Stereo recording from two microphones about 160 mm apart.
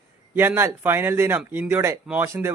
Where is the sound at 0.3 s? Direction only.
15° right (ahead or behind).